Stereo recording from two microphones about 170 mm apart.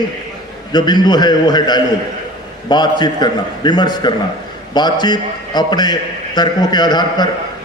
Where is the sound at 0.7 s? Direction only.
25° left (ahead or behind).